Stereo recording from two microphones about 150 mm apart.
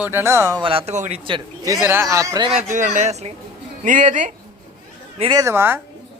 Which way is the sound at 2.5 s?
55° right (ahead or behind).